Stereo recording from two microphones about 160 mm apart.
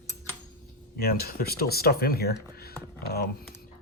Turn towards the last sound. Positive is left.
turn(degrees=80)